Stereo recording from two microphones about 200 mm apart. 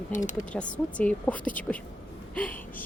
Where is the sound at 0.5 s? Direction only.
5° left (ahead or behind).